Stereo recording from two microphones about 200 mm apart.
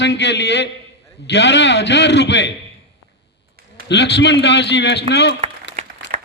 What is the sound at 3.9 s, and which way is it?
A man's voice, 60° left (ahead or behind).